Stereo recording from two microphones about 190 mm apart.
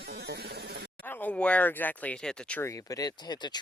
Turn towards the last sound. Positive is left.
turn(degrees=20)  # may be behind; listen again after turning